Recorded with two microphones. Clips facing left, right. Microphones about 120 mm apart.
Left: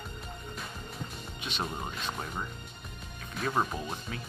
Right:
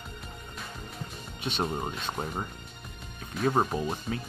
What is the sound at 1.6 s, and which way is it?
Speech, 30° right (ahead or behind).